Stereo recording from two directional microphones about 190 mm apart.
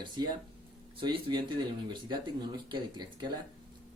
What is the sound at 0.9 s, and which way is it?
Speech, 25° right (ahead or behind).